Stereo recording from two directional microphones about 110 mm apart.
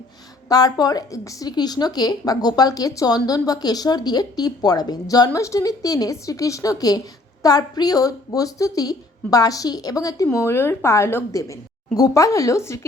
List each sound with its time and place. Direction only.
0.4 s a woman's voice: 35° left (ahead or behind)